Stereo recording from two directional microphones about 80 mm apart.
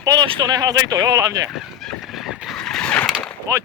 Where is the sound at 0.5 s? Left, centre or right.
Right.